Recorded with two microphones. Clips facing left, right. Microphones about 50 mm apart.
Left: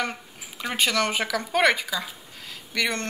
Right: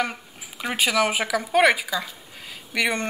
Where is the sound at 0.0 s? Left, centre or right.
Centre.